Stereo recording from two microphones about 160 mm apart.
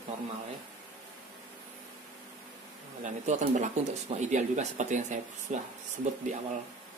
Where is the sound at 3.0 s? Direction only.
50° right (ahead or behind).